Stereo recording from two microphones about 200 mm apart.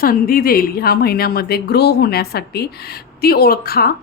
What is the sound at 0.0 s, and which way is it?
Speech, 45° left (ahead or behind).